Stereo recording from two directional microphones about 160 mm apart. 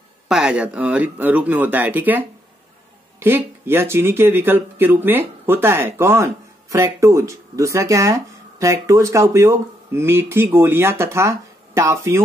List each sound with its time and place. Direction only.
0.3 s speech: 5° right (ahead or behind)